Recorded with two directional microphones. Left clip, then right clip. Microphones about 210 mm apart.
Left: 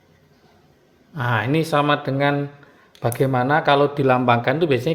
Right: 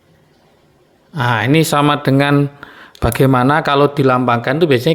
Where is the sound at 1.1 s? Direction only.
20° right (ahead or behind).